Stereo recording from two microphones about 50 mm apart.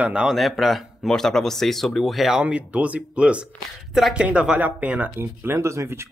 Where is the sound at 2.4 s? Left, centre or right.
Right.